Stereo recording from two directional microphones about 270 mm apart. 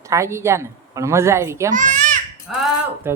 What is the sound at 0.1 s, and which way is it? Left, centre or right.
Speech, centre.